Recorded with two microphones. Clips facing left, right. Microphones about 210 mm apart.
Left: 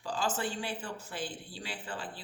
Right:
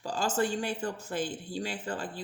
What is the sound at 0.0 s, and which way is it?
Speech, 45° right (ahead or behind).